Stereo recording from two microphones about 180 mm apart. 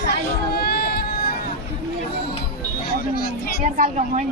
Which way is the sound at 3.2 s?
60° left (ahead or behind).